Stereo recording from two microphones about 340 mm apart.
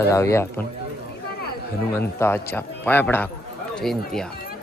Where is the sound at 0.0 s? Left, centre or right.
Centre.